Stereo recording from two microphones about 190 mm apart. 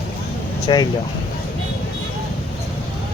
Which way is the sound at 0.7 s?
25° left (ahead or behind).